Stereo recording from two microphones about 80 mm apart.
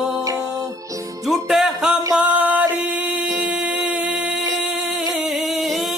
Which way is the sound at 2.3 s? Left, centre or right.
Centre.